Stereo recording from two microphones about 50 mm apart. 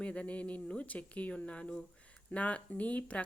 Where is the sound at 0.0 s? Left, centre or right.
Left.